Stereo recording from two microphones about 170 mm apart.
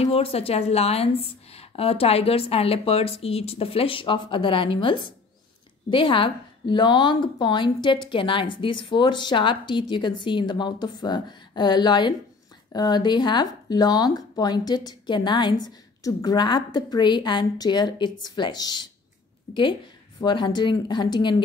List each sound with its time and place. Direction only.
0.0 s a woman's voice: 35° left (ahead or behind)
20.2 s a woman's voice: 25° left (ahead or behind)